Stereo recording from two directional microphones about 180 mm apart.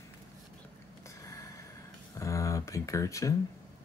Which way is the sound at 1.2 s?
15° left (ahead or behind).